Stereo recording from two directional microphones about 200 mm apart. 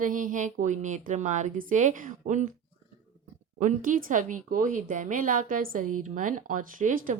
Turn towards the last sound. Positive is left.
turn(degrees=-45)  # may be behind; listen again after turning